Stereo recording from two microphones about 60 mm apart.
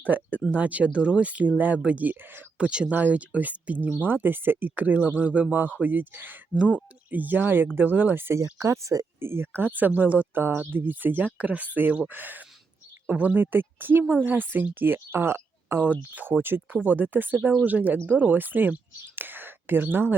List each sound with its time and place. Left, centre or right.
0.0 s speech: right
8.5 s speech: right
9.2 s speech: right
16.8 s speech: right